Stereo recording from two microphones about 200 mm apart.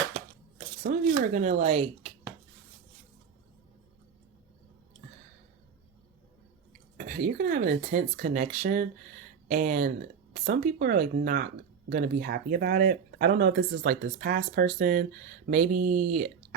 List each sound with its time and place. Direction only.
0.9 s shuffling cards: 45° right (ahead or behind)
1.3 s speech: 40° right (ahead or behind)
6.9 s speech: 40° right (ahead or behind)